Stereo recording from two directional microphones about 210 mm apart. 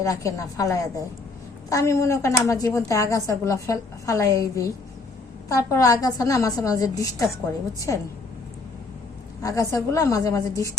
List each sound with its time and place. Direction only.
0.0 s a woman's voice: 15° left (ahead or behind)
9.4 s a woman's voice: 15° left (ahead or behind)